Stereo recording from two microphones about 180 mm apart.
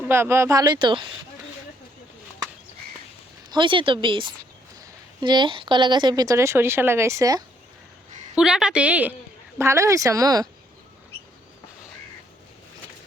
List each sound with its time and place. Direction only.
0.1 s a woman's voice: 15° right (ahead or behind)
3.5 s a woman's voice: 25° right (ahead or behind)
8.4 s a woman's voice: 5° right (ahead or behind); by 10.5 s 20° right (ahead or behind)